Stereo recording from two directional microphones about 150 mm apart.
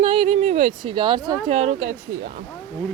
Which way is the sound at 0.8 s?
30° right (ahead or behind).